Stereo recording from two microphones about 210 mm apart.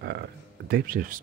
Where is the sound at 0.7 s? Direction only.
40° right (ahead or behind).